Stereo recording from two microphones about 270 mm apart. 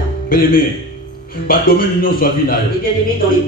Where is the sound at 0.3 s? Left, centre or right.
Left.